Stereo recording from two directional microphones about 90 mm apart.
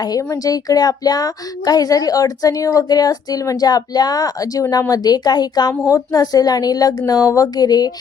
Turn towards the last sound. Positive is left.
turn(degrees=45)  # may be behind; listen again after turning